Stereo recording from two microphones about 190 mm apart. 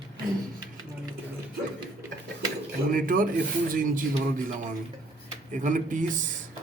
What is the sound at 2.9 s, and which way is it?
Speech, 45° right (ahead or behind).